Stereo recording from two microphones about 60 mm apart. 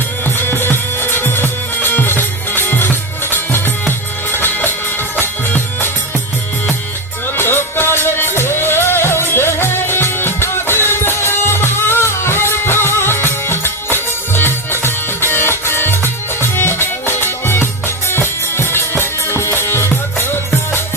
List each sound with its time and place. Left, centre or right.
0.3 s music: left
7.3 s music: left